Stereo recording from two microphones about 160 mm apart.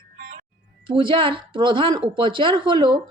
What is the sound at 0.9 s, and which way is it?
A woman's voice, 30° right (ahead or behind).